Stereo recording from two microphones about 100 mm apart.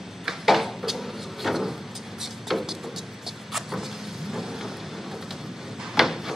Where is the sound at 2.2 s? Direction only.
Centre (ahead or behind).